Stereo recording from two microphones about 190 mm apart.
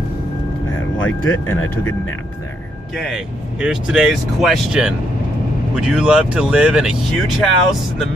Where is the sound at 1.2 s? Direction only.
90° left.